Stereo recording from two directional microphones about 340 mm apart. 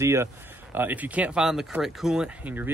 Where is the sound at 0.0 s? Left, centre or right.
Centre.